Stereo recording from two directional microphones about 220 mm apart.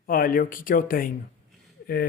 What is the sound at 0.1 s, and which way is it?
Speech, 40° left (ahead or behind).